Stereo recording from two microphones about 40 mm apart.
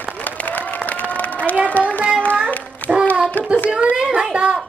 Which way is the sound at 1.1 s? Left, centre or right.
Left.